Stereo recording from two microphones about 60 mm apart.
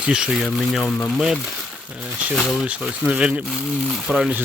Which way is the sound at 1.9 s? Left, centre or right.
Right.